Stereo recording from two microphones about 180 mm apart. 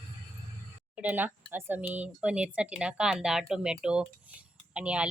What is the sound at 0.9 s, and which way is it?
A woman's voice, 10° right (ahead or behind).